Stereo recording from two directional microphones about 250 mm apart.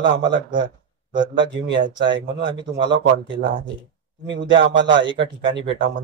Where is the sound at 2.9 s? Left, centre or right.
Right.